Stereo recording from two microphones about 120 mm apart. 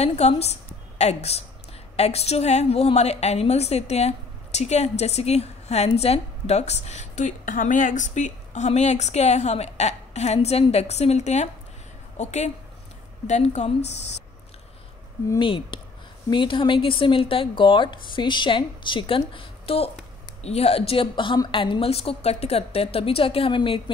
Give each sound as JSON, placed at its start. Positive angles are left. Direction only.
{"t": 0.0, "sound": "a woman's voice", "side_deg": 60}
{"t": 15.3, "sound": "speech", "side_deg": 45}